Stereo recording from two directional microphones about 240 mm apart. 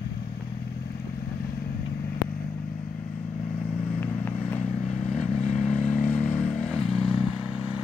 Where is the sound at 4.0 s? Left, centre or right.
Centre.